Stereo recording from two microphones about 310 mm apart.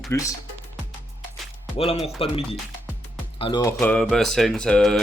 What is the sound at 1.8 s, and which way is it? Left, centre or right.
Speech, centre.